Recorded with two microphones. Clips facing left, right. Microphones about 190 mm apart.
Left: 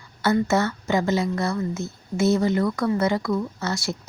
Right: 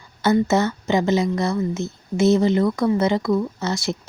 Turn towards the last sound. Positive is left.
turn(degrees=-20)  # may be behind; listen again after turning